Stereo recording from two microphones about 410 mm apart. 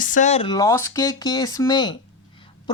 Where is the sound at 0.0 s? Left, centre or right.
Centre.